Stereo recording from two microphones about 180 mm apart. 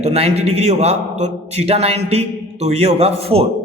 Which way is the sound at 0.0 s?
35° right (ahead or behind).